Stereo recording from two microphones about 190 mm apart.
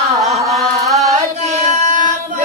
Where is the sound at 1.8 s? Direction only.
40° right (ahead or behind).